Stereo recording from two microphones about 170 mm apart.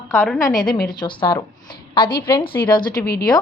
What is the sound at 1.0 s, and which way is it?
Speech, 25° left (ahead or behind).